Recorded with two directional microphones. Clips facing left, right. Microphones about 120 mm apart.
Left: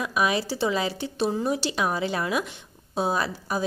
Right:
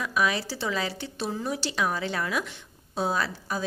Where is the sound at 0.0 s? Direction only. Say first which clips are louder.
Left 2 dB; 15° left (ahead or behind).